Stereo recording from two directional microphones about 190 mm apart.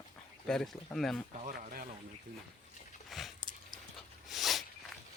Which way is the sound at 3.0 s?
Centre (ahead or behind).